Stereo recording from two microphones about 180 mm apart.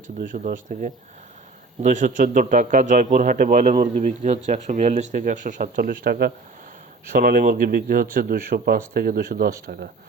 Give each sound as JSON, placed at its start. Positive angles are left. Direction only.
{"t": 0.2, "sound": "a man's voice", "side_deg": -50}